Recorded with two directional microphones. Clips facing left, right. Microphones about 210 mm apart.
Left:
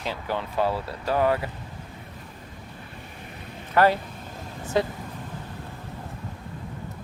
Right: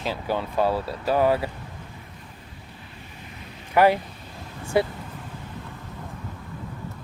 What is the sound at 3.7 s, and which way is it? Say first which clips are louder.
Speech: right 2 dB; 15° right (ahead or behind).